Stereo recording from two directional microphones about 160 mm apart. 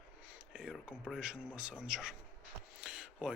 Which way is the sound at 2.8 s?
5° right (ahead or behind).